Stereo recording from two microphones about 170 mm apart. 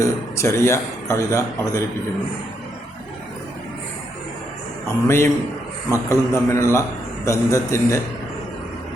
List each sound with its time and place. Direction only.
0.0 s speech: 15° left (ahead or behind)
5.0 s speech: 15° left (ahead or behind)